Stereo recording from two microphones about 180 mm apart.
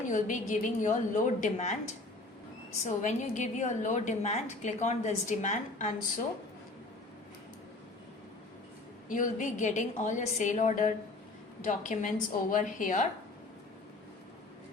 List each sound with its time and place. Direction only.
0.1 s a woman's voice: 45° left (ahead or behind)
3.0 s a woman's voice: 40° left (ahead or behind)
9.0 s a woman's voice: 45° left (ahead or behind)